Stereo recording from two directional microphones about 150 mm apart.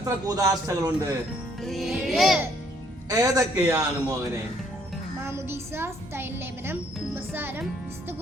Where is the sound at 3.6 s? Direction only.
15° right (ahead or behind).